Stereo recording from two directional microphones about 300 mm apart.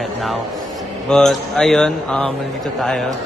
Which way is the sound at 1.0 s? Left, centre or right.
Centre.